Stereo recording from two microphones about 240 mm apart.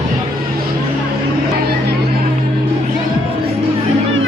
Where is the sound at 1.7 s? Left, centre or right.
Right.